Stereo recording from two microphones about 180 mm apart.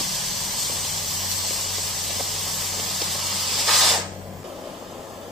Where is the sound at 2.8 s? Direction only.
Centre (ahead or behind).